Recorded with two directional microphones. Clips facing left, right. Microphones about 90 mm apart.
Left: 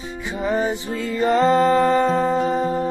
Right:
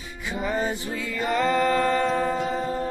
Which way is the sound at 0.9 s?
30° left (ahead or behind).